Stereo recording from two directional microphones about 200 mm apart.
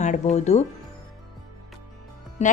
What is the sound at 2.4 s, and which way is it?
Speech, 35° left (ahead or behind).